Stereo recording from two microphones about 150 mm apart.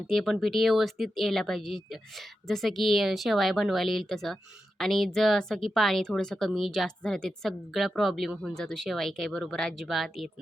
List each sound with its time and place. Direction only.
0.1 s a woman's voice: centre (ahead or behind)